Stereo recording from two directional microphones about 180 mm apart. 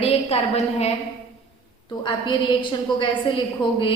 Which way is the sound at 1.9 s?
25° left (ahead or behind).